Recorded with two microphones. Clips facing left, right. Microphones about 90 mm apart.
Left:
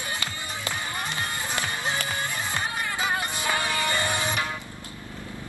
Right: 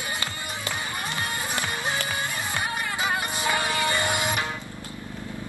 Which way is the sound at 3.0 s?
20° right (ahead or behind).